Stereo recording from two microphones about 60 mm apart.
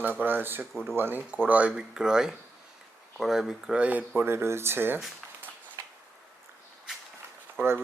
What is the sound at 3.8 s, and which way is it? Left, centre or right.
Speech, right.